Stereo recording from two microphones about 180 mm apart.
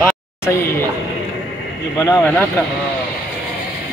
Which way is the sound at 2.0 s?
15° left (ahead or behind).